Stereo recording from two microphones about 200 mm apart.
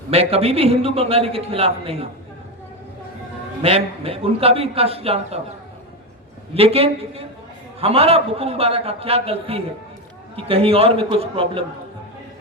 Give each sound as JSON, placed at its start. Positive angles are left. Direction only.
{"t": 0.1, "sound": "a man's voice", "side_deg": -30}
{"t": 3.6, "sound": "a man's voice", "side_deg": -30}
{"t": 6.5, "sound": "a man's voice", "side_deg": -30}